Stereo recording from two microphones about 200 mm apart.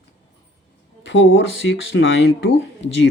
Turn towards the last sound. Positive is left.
turn(degrees=70)  # may be behind; listen again after turning